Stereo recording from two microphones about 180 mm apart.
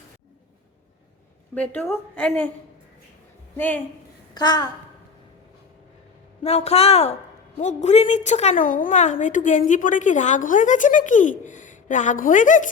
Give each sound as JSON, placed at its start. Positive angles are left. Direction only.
{"t": 1.5, "sound": "a woman's voice", "side_deg": 10}
{"t": 4.4, "sound": "a child's voice", "side_deg": 20}
{"t": 6.4, "sound": "a woman's voice", "side_deg": 35}